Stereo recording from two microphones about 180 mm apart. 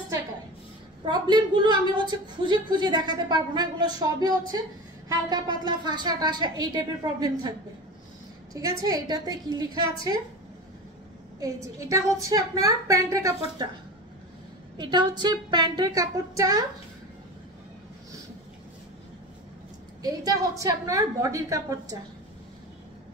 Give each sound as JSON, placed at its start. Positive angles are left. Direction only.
{"t": 1.0, "sound": "a woman's voice", "side_deg": -25}
{"t": 8.5, "sound": "a woman's voice", "side_deg": -20}
{"t": 11.3, "sound": "a woman's voice", "side_deg": -20}
{"t": 14.8, "sound": "a woman's voice", "side_deg": -25}
{"t": 20.0, "sound": "a woman's voice", "side_deg": -20}